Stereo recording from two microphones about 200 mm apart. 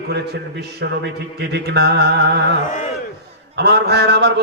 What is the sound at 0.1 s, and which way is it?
A man's voice, 55° right (ahead or behind).